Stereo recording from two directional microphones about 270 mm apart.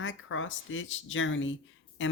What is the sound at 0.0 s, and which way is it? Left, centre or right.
Speech, left.